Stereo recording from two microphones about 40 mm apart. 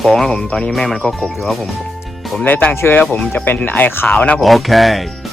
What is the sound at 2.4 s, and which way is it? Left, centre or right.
Speech, left.